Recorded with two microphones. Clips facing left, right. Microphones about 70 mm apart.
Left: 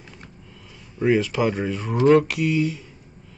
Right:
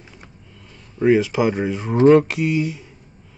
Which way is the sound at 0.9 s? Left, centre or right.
Centre.